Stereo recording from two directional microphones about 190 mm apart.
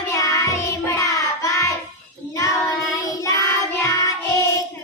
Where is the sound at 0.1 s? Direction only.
15° left (ahead or behind).